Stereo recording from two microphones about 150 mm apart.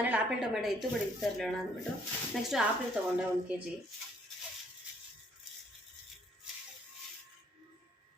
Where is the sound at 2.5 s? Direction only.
Centre (ahead or behind).